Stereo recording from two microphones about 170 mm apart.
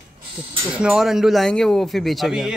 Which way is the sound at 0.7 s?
5° right (ahead or behind).